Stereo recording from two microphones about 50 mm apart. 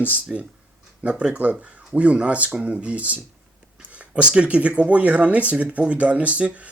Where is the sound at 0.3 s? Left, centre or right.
Centre.